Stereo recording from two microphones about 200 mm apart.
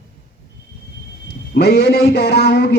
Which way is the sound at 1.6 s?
55° left (ahead or behind).